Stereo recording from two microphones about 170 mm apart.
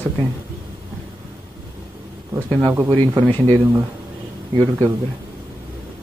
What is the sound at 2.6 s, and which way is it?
Speech, 15° right (ahead or behind).